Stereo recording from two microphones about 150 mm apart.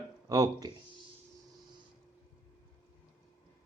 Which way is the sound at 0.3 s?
25° right (ahead or behind).